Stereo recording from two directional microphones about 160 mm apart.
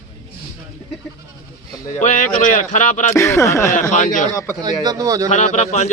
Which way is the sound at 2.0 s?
55° left (ahead or behind).